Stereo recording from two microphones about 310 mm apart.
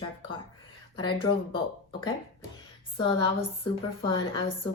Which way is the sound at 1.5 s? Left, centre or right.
Centre.